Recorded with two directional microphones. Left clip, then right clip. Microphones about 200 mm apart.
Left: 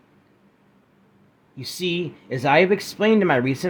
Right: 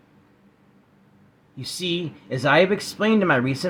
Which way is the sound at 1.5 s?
35° left (ahead or behind).